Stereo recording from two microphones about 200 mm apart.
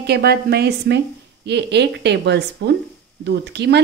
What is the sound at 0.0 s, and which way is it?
Speech, 55° right (ahead or behind).